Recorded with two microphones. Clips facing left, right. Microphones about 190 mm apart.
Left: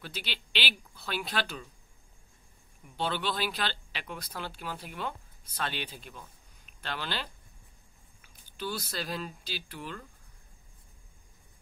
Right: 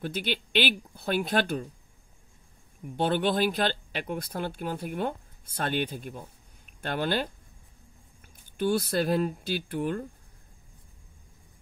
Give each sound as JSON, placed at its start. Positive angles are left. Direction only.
{"t": 0.0, "sound": "speech", "side_deg": -50}
{"t": 3.0, "sound": "speech", "side_deg": -50}